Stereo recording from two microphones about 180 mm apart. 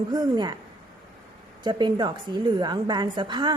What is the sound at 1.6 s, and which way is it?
A woman's voice, 25° right (ahead or behind).